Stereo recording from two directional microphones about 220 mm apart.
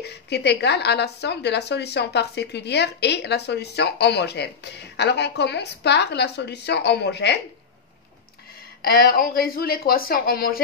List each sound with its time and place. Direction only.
0.0 s speech: 50° left (ahead or behind)
8.8 s speech: 40° left (ahead or behind)